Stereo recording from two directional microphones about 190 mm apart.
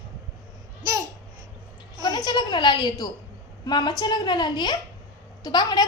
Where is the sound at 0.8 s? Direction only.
20° right (ahead or behind).